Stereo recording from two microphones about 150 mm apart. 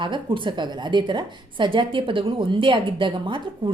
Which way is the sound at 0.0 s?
35° right (ahead or behind).